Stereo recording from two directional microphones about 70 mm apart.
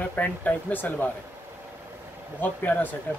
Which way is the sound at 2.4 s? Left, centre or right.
Left.